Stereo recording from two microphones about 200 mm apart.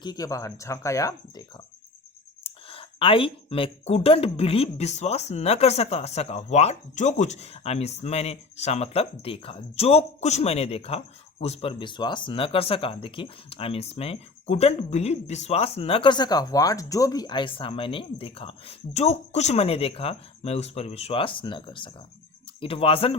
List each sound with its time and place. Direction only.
0.0 s speech: 20° left (ahead or behind)
2.4 s speech: 30° left (ahead or behind)